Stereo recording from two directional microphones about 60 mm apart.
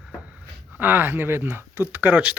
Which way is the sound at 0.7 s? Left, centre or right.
Right.